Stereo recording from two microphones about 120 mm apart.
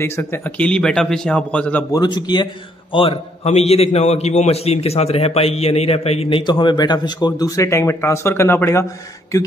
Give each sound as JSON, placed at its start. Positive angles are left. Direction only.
{"t": 0.0, "sound": "speech", "side_deg": 20}
{"t": 1.9, "sound": "speech", "side_deg": 35}
{"t": 2.9, "sound": "a man's voice", "side_deg": 50}
{"t": 6.4, "sound": "a man's voice", "side_deg": 40}